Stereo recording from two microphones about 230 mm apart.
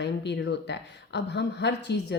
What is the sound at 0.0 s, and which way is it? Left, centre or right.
Speech, left.